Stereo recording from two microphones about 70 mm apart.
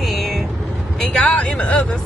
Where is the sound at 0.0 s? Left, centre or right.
Centre.